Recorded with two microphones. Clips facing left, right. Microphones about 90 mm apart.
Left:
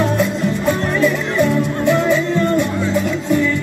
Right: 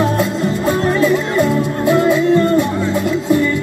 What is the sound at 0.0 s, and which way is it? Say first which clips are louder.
Music: right 1 dB; 5° right (ahead or behind).